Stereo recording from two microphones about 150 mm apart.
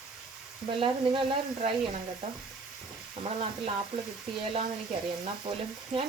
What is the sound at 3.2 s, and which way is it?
Speech, 40° right (ahead or behind).